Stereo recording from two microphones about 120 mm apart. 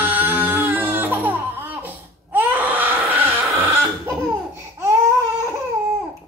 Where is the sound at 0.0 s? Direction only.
15° right (ahead or behind).